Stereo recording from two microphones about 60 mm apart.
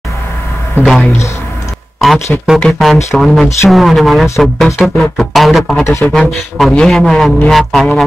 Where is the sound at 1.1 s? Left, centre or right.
Left.